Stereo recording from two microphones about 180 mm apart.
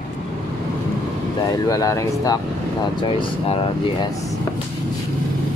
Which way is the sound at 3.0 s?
30° left (ahead or behind).